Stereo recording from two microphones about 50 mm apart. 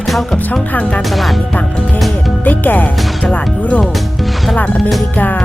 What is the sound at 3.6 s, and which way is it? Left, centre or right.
Speech, left.